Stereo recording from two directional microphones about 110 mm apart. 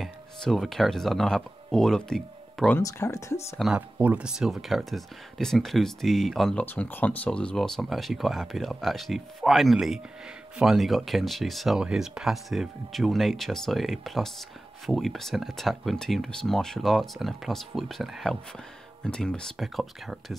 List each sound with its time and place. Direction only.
0.0 s speech: centre (ahead or behind)
2.8 s speech: 30° left (ahead or behind)
3.7 s speech: 10° right (ahead or behind)
6.6 s speech: 15° left (ahead or behind); by 20.3 s centre (ahead or behind)